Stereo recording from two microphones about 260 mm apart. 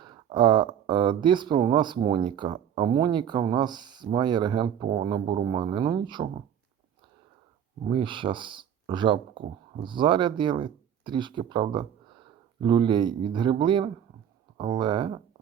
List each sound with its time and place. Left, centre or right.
0.0 s speech: centre
7.9 s speech: centre